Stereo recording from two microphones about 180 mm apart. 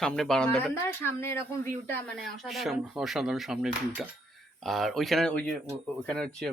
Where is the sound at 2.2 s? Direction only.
Centre (ahead or behind).